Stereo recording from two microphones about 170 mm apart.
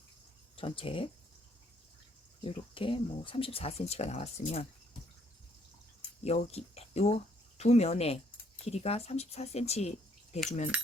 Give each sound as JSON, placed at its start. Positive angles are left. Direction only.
{"t": 0.5, "sound": "speech", "side_deg": 30}
{"t": 2.4, "sound": "speech", "side_deg": 30}
{"t": 6.2, "sound": "speech", "side_deg": 35}